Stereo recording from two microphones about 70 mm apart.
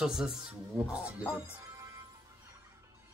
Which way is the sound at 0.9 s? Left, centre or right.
Centre.